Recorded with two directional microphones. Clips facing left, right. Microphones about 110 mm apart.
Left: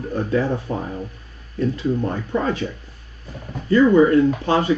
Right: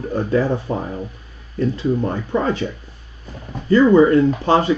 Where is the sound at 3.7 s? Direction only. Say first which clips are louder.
Right 2 dB; 30° right (ahead or behind).